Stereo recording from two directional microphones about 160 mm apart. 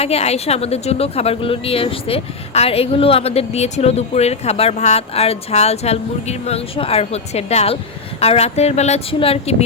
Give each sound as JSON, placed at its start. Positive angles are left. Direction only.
{"t": 0.0, "sound": "speech", "side_deg": 40}